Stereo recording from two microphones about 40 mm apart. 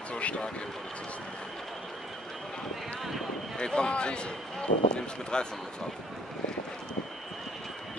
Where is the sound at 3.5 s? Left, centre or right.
Left.